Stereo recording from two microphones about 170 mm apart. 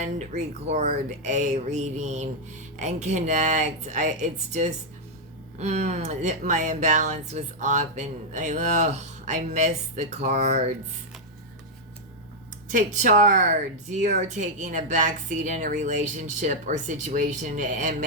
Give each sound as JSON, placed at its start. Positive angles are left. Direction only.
{"t": 0.0, "sound": "speech", "side_deg": -45}
{"t": 12.7, "sound": "speech", "side_deg": -45}